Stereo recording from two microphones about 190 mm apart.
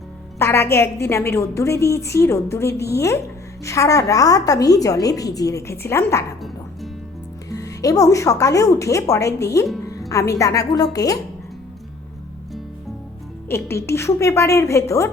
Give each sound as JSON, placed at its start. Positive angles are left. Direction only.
{"t": 0.3, "sound": "a woman's voice", "side_deg": 15}
{"t": 7.5, "sound": "a woman's voice", "side_deg": 20}
{"t": 13.5, "sound": "a woman's voice", "side_deg": 15}